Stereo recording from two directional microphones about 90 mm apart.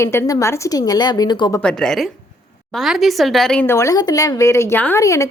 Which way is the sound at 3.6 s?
35° left (ahead or behind).